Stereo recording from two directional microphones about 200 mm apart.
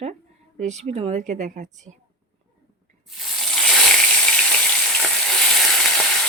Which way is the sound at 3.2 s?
5° left (ahead or behind).